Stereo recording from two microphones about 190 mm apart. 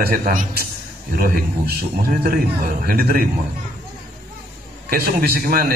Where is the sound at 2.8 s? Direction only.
50° right (ahead or behind).